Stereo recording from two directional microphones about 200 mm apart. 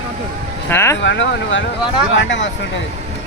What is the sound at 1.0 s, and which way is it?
Speech, 65° left (ahead or behind).